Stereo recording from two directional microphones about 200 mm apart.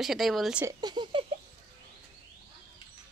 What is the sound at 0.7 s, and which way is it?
Speech, 20° right (ahead or behind).